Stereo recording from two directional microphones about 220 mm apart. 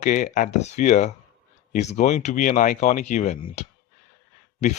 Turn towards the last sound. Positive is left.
turn(degrees=30)  # may be behind; listen again after turning